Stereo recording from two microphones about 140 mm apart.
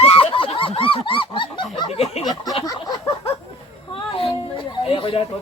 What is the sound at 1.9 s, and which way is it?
Speech, 45° left (ahead or behind).